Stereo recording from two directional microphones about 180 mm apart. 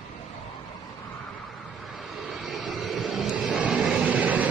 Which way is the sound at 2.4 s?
Centre (ahead or behind).